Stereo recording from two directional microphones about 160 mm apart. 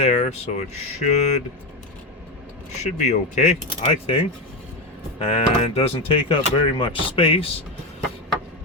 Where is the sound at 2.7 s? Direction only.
45° left (ahead or behind).